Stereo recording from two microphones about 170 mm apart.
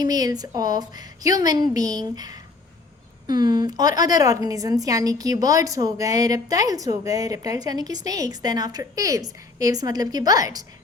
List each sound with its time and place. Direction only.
0.0 s a woman's voice: 20° right (ahead or behind)